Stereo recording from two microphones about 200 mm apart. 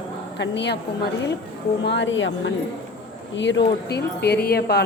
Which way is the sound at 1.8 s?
65° left (ahead or behind).